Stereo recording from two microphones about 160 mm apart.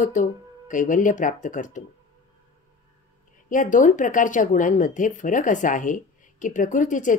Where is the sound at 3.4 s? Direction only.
55° left (ahead or behind).